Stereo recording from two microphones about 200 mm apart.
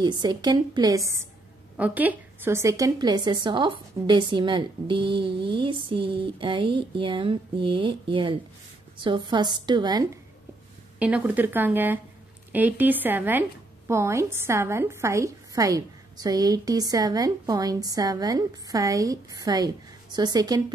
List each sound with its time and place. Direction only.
0.0 s a woman's voice: 20° right (ahead or behind)
11.0 s a woman's voice: 5° right (ahead or behind)